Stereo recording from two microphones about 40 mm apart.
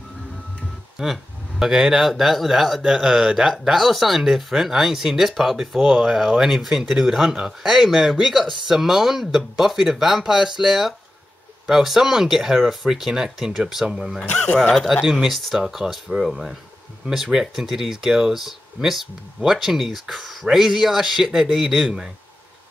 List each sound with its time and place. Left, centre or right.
0.9 s speech: centre
14.3 s speech: left
15.2 s speech: centre
20.5 s speech: centre